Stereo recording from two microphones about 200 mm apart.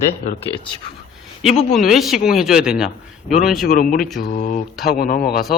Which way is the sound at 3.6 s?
45° left (ahead or behind).